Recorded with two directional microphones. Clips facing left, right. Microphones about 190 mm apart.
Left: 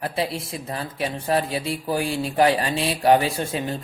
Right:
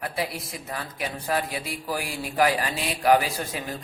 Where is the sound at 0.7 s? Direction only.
30° left (ahead or behind).